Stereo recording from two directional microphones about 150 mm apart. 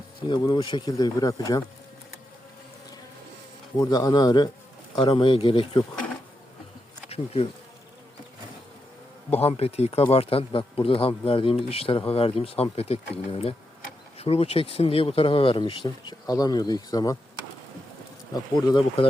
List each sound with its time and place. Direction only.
0.3 s speech: 30° left (ahead or behind)
3.8 s speech: 25° left (ahead or behind)
9.3 s speech: 45° left (ahead or behind); by 17.2 s 25° left (ahead or behind)
18.5 s speech: 30° left (ahead or behind)